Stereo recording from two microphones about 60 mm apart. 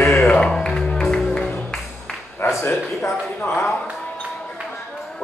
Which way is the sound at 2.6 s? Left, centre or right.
Left.